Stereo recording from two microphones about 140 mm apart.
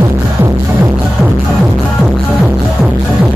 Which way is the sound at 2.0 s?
5° right (ahead or behind).